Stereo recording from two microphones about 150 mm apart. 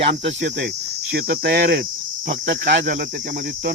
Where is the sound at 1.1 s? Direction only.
90° right.